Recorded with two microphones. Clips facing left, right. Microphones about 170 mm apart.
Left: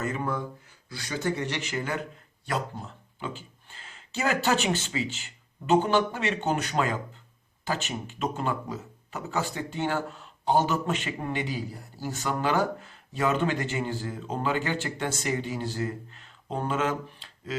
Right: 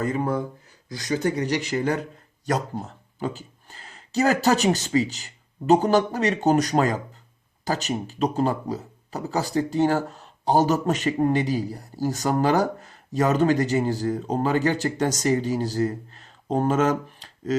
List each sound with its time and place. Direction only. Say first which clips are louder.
0.0 s speech: right 6 dB; 35° right (ahead or behind)